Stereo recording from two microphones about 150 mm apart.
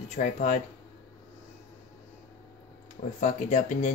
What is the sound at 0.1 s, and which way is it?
Speech, 55° left (ahead or behind).